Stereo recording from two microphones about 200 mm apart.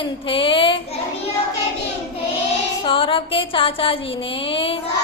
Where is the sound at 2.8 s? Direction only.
25° left (ahead or behind).